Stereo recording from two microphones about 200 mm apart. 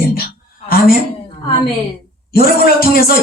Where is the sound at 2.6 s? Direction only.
50° left (ahead or behind).